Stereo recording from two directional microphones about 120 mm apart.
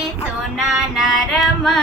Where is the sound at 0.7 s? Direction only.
5° right (ahead or behind).